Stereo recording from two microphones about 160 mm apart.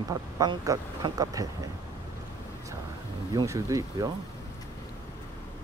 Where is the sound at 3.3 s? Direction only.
20° right (ahead or behind).